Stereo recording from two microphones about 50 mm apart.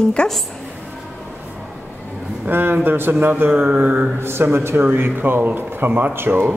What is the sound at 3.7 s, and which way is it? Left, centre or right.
Mantra, right.